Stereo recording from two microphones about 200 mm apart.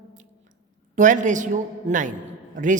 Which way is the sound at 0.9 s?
40° right (ahead or behind).